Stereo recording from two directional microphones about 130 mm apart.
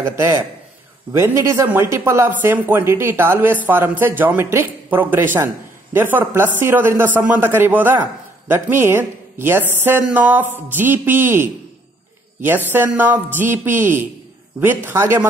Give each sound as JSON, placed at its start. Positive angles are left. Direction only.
{"t": 0.0, "sound": "a man's voice", "side_deg": -20}